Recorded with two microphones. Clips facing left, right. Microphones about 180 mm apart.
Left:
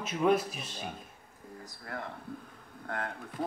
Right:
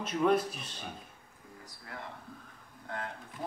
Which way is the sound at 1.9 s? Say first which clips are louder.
Left 5 dB; 50° left (ahead or behind).